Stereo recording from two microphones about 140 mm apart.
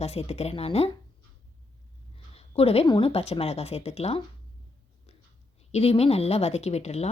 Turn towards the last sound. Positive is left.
turn(degrees=50)  # may be behind; listen again after turning